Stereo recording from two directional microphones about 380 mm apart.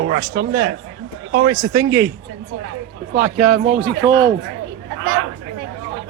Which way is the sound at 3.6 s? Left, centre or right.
Right.